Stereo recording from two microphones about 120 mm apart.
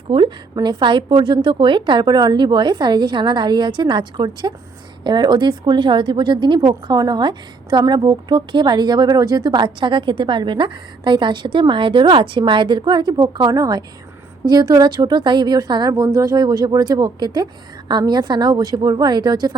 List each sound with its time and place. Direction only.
0.1 s a woman's voice: 45° right (ahead or behind)